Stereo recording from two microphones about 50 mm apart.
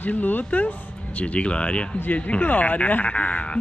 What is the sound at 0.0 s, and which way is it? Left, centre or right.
Speech, left.